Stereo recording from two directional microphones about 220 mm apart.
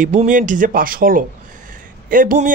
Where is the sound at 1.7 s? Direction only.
40° right (ahead or behind).